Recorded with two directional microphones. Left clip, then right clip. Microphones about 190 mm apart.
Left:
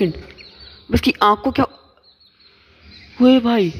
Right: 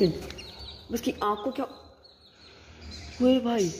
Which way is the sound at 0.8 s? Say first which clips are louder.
Left 13 dB; 25° left (ahead or behind).